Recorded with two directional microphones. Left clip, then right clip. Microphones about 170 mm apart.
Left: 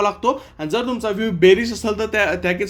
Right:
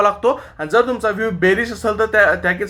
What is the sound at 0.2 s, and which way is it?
Speech, 15° left (ahead or behind).